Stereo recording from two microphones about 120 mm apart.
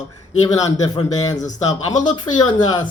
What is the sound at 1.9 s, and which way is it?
Speech, 90° left.